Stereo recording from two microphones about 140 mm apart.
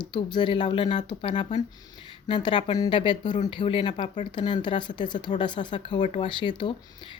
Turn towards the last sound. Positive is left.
turn(degrees=35)  # may be behind; listen again after turning